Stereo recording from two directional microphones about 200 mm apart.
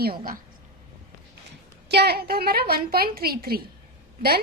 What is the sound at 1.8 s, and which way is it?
A woman's voice, 55° right (ahead or behind).